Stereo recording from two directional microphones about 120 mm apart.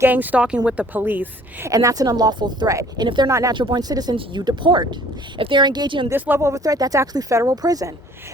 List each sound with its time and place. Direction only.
0.0 s a woman's voice: 15° right (ahead or behind)
1.7 s speech: 30° right (ahead or behind)
3.2 s speech: 25° right (ahead or behind)
3.5 s speech: 40° right (ahead or behind)
6.1 s speech: 15° right (ahead or behind)